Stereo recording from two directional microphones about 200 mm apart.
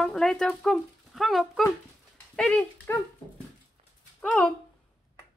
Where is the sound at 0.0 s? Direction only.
5° left (ahead or behind).